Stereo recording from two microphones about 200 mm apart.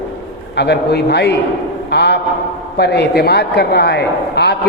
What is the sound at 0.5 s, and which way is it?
A man's voice, 60° left (ahead or behind).